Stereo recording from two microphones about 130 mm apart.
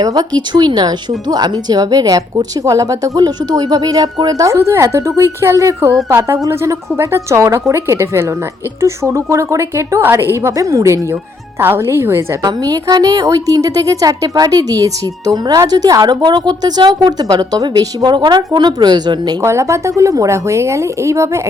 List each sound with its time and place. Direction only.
0.0 s a woman's voice: 30° right (ahead or behind)
12.4 s a woman's voice: 30° right (ahead or behind)
19.4 s speech: 20° right (ahead or behind)